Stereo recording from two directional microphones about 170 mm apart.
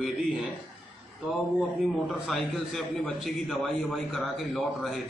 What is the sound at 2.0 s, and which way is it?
A man's voice, centre (ahead or behind).